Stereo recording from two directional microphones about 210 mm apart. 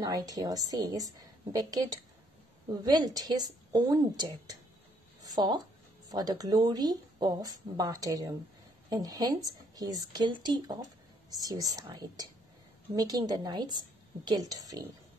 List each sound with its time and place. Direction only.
0.0 s a woman's voice: 20° right (ahead or behind)